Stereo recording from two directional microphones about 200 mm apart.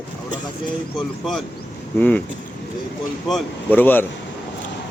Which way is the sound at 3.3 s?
5° left (ahead or behind).